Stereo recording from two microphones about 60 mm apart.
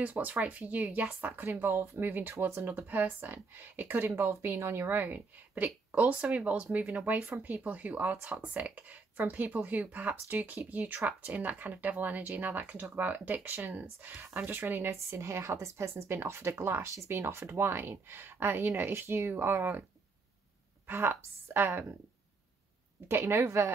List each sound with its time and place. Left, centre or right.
0.0 s speech: right
4.3 s speech: right
14.9 s speech: right
20.8 s speech: right
23.0 s speech: right